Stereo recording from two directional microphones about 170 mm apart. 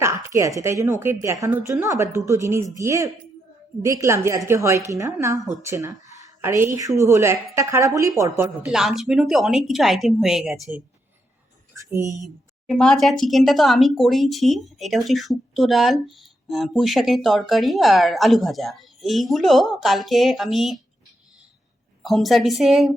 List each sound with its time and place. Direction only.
0.3 s a woman's voice: 20° right (ahead or behind)
8.6 s speech: centre (ahead or behind)
11.8 s speech: 20° right (ahead or behind)
12.2 s speech: centre (ahead or behind)
22.0 s speech: centre (ahead or behind)